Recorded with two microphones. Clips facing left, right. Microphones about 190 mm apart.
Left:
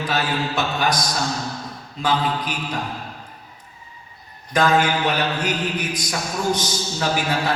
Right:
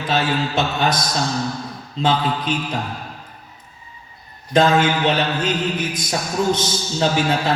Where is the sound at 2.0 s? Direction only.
25° right (ahead or behind).